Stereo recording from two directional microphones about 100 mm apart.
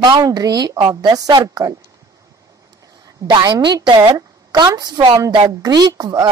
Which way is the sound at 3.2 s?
50° right (ahead or behind).